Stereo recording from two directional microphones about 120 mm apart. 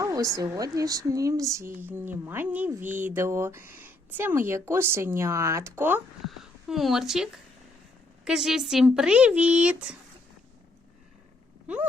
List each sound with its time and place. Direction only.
0.0 s speech: 30° right (ahead or behind)
6.2 s a woman's voice: centre (ahead or behind)